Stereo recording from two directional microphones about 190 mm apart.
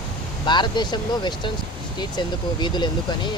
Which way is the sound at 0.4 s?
25° left (ahead or behind).